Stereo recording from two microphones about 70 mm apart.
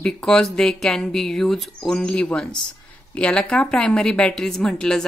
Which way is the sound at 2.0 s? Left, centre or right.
Centre.